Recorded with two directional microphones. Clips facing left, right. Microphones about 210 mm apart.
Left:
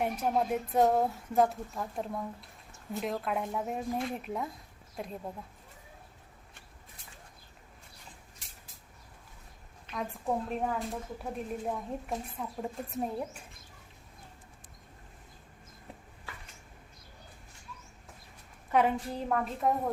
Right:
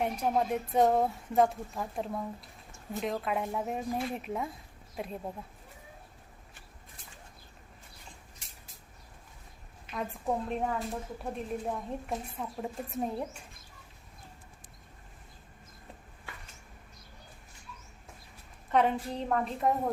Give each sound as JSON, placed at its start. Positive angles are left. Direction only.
{"t": 0.0, "sound": "speech", "side_deg": 5}
{"t": 9.9, "sound": "speech", "side_deg": 0}
{"t": 18.7, "sound": "speech", "side_deg": 5}